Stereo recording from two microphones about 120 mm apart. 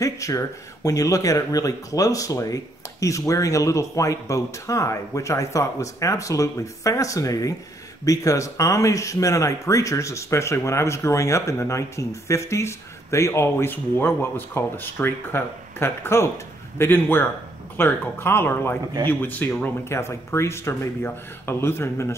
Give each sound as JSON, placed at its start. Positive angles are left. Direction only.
{"t": 0.0, "sound": "a man's voice", "side_deg": 25}